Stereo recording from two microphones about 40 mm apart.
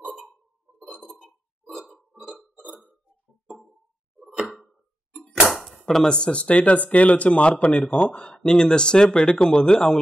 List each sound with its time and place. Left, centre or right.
0.7 s chink: right
2.3 s burping: right
5.1 s a sound: centre
6.0 s speech: left